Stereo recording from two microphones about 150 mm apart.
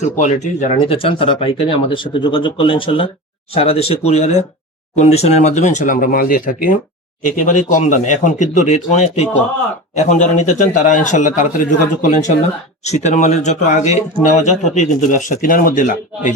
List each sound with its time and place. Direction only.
0.0 s speech: 50° left (ahead or behind)
12.8 s speech: 50° left (ahead or behind)